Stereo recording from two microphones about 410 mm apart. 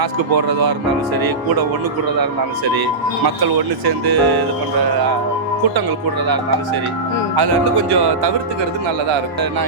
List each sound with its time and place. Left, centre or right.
0.0 s speech: right
3.8 s speech: right
7.3 s speech: right